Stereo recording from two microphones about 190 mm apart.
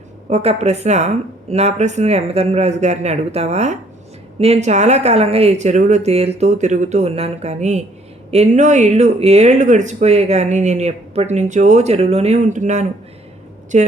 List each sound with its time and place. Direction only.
0.3 s speech: 35° right (ahead or behind)